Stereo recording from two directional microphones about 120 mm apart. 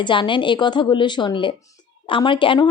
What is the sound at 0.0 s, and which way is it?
A woman's voice, 45° left (ahead or behind).